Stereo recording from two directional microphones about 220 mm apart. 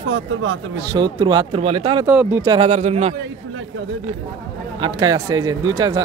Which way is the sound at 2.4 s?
20° right (ahead or behind).